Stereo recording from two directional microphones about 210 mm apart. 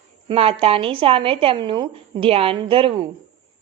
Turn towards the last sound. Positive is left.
turn(degrees=-25)  # may be behind; listen again after turning